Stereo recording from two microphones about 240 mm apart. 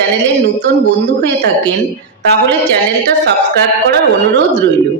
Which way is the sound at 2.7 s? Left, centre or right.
Right.